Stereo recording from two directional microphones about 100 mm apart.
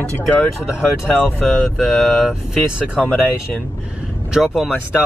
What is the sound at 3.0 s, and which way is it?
Speech, 15° left (ahead or behind).